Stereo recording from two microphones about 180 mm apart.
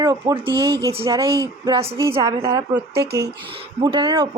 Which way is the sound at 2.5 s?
20° right (ahead or behind).